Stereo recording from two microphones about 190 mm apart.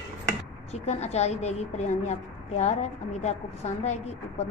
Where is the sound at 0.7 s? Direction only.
35° left (ahead or behind).